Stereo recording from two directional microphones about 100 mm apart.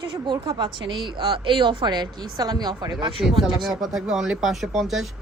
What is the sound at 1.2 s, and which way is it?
Speech, 60° right (ahead or behind).